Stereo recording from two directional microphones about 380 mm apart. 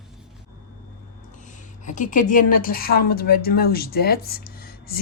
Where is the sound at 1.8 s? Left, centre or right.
Centre.